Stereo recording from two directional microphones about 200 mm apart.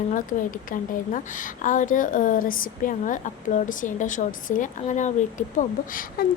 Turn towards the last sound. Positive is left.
turn(degrees=45)  # may be behind; listen again after turning